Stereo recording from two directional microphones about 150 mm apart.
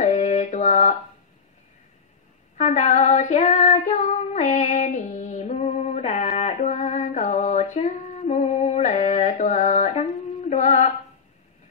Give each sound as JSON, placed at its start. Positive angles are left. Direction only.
{"t": 0.0, "sound": "mantra", "side_deg": 50}
{"t": 2.5, "sound": "female singing", "side_deg": 50}